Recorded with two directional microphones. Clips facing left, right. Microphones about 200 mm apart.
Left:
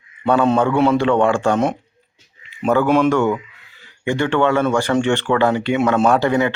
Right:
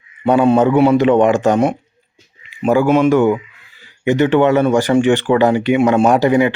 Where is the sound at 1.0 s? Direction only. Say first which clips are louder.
Right 4 dB; 20° right (ahead or behind).